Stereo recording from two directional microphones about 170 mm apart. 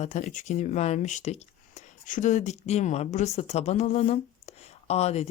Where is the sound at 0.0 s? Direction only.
45° left (ahead or behind).